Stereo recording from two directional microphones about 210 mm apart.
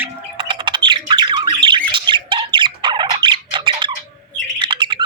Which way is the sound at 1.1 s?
20° right (ahead or behind).